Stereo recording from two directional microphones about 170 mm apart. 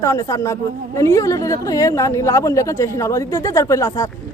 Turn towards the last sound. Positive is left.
turn(degrees=15)  # may be behind; listen again after turning